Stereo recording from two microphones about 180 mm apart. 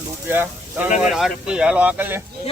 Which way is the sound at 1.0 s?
Centre (ahead or behind).